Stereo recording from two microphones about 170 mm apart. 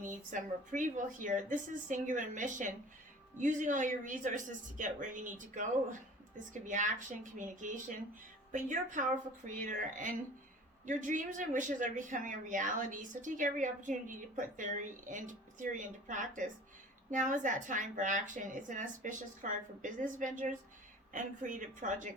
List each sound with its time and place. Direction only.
0.0 s speech: 50° right (ahead or behind)